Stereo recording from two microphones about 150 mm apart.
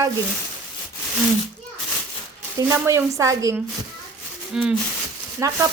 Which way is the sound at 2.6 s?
20° right (ahead or behind).